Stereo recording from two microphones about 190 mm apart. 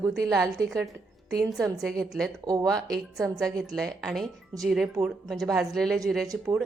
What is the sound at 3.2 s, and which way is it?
Speech, centre (ahead or behind).